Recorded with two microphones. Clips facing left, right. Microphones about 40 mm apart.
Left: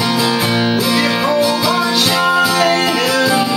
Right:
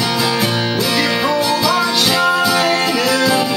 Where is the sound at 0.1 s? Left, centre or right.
Centre.